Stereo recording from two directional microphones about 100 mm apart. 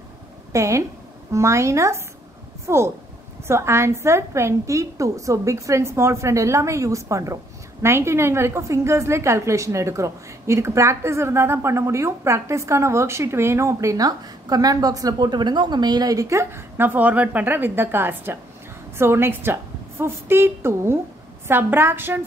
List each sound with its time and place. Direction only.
0.5 s a woman's voice: 30° right (ahead or behind)